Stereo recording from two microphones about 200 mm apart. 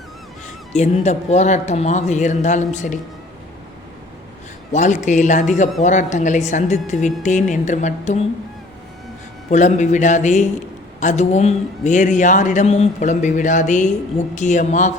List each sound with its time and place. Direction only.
0.7 s a man's voice: 35° left (ahead or behind)
4.7 s a man's voice: 35° left (ahead or behind)
9.5 s a man's voice: 35° left (ahead or behind)